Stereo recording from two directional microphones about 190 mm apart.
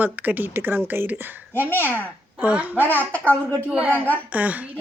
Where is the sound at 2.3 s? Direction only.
5° right (ahead or behind).